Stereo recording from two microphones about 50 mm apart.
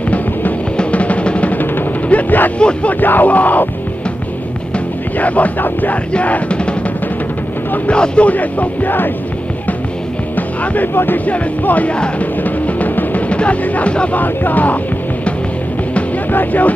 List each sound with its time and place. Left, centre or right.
0.7 s music: left
2.6 s speech: left
4.7 s speech: left
6.1 s music: left
7.9 s speech: left
10.3 s music: left
14.2 s speech: left
16.3 s music: left